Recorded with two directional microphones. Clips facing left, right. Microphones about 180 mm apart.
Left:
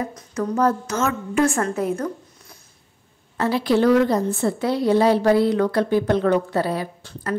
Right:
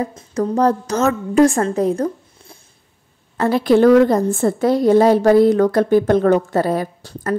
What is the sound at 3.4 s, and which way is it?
A woman's voice, 50° right (ahead or behind).